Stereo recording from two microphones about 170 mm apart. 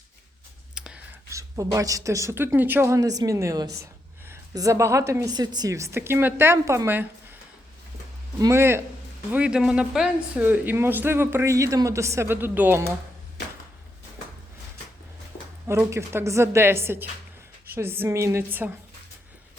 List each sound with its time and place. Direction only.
0.7 s a sound: 5° right (ahead or behind)
1.3 s a woman's voice: 20° right (ahead or behind)
8.4 s a woman's voice: 15° right (ahead or behind)
15.6 s a woman's voice: 15° right (ahead or behind)